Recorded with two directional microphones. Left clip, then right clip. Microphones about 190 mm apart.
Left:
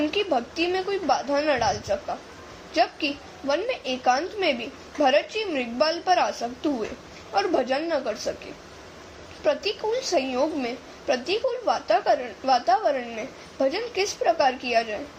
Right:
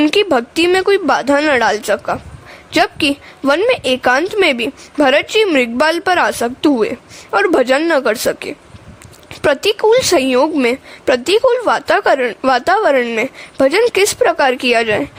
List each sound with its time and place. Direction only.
0.0 s a woman's voice: 55° right (ahead or behind)